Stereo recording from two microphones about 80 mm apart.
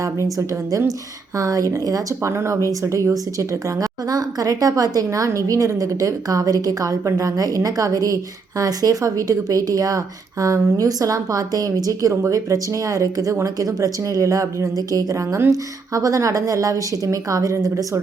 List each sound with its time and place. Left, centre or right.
0.0 s a woman's voice: right